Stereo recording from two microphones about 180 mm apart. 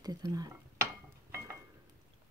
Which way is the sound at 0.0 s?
20° right (ahead or behind).